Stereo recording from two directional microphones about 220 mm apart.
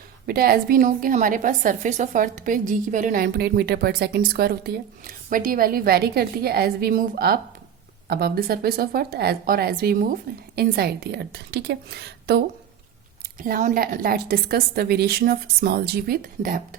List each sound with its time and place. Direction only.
0.3 s a woman's voice: 45° right (ahead or behind)
13.4 s a woman's voice: 35° right (ahead or behind)